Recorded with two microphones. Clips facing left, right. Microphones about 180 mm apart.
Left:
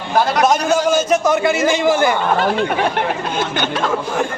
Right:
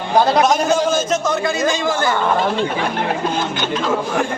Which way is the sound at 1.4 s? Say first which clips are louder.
Left 3 dB; 15° left (ahead or behind).